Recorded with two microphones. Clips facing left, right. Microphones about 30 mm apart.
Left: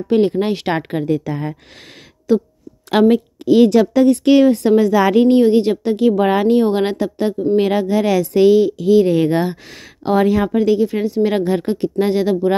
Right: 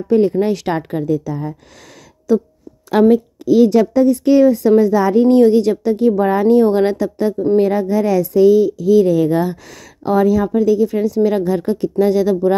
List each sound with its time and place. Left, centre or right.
0.1 s a woman's voice: left
2.3 s speech: left
2.9 s a woman's voice: left
4.9 s a woman's voice: left
5.4 s speech: left
5.9 s a woman's voice: left
6.7 s speech: left
7.5 s a woman's voice: left
10.9 s speech: left